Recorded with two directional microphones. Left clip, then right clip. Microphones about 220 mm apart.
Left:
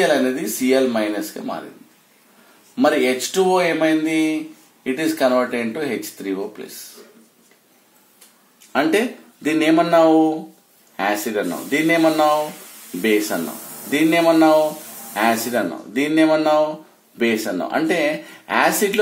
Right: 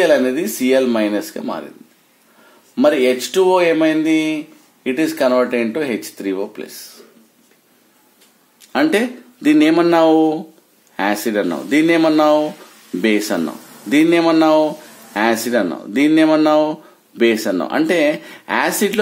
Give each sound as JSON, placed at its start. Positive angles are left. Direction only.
{"t": 0.0, "sound": "speech", "side_deg": -45}
{"t": 2.7, "sound": "speech", "side_deg": -50}
{"t": 8.7, "sound": "speech", "side_deg": -50}
{"t": 13.8, "sound": "speech", "side_deg": -50}